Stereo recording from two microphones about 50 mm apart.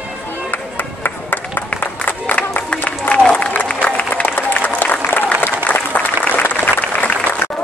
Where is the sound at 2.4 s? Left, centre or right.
Left.